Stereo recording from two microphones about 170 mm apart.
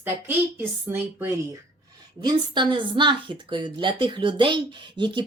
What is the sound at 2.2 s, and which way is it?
A woman's voice, 25° right (ahead or behind).